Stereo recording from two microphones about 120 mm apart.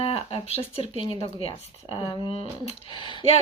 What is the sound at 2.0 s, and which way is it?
Speech, 40° left (ahead or behind).